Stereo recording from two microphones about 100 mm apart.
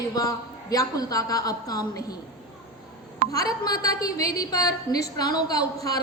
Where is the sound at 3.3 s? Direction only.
40° left (ahead or behind).